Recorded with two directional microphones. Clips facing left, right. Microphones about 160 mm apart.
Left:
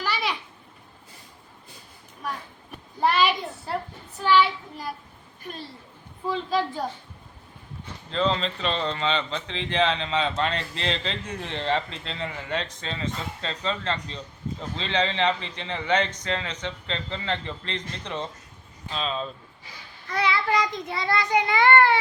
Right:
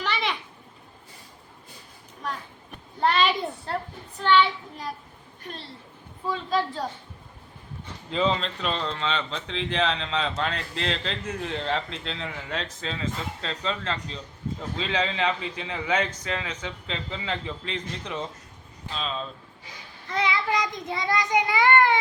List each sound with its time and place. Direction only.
0.0 s babbling: 5° left (ahead or behind)
3.0 s a sound: 5° left (ahead or behind)
4.2 s a child's voice: 5° left (ahead or behind)
8.1 s speech: 5° right (ahead or behind)
20.1 s child singing: 15° right (ahead or behind)